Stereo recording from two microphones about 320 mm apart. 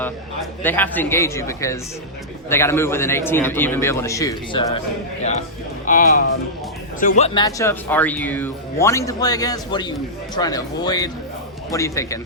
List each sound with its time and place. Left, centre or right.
0.6 s speech: centre
5.8 s speech: left; by 12.2 s centre